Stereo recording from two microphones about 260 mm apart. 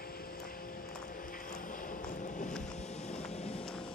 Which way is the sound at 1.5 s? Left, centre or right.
Left.